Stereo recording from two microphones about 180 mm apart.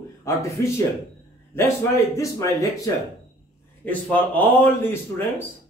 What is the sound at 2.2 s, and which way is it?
A man's voice, 20° left (ahead or behind).